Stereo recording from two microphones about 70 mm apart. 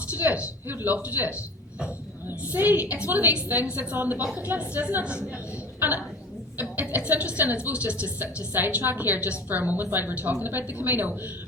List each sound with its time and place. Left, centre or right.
0.1 s a woman's voice: right
2.4 s a woman's voice: right
6.6 s a woman's voice: right